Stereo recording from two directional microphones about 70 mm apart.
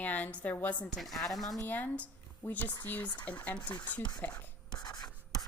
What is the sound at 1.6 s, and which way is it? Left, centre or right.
A woman's voice, left.